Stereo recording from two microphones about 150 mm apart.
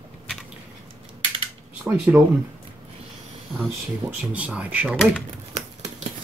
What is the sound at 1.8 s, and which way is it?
Speech, 10° right (ahead or behind).